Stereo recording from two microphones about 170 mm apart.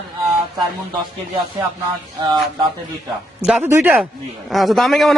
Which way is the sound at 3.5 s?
10° right (ahead or behind).